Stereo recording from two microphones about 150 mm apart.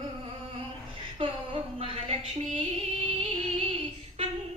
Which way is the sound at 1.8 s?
40° right (ahead or behind).